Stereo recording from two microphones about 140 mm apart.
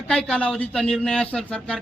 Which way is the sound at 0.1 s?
5° left (ahead or behind).